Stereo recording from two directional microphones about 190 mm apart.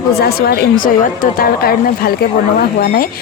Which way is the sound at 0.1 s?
55° left (ahead or behind).